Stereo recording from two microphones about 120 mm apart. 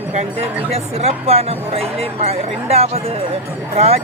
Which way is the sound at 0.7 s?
60° right (ahead or behind).